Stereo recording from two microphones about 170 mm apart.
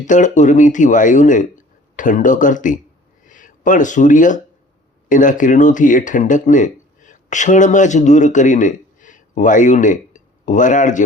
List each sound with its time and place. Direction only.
0.1 s speech: 45° left (ahead or behind)